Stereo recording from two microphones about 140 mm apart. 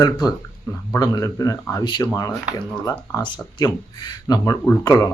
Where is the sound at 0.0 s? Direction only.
25° left (ahead or behind).